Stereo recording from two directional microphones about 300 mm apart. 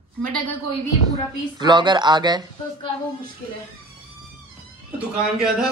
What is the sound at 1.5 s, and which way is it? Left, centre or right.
Speech, centre.